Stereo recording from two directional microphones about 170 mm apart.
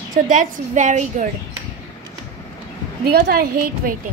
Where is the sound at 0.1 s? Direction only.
50° right (ahead or behind).